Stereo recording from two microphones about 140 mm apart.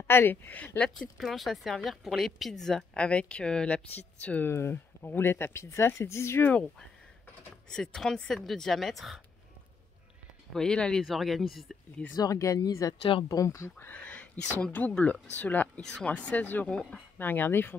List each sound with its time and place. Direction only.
0.0 s speech: 15° left (ahead or behind); by 9.2 s centre (ahead or behind)
10.5 s speech: 5° left (ahead or behind)
12.2 s speech: 25° left (ahead or behind)